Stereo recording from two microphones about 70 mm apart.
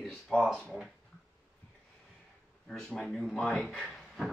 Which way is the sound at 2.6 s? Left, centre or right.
Centre.